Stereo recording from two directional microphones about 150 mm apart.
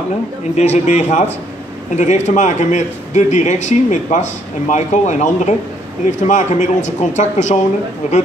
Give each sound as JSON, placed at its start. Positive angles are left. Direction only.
{"t": 0.6, "sound": "a man's voice", "side_deg": 50}